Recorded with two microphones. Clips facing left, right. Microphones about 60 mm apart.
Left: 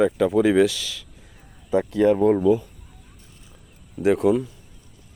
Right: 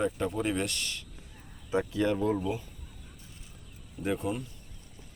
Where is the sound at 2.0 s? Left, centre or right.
Left.